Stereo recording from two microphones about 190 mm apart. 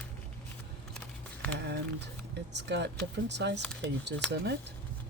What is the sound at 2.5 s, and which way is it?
Speech, 65° right (ahead or behind).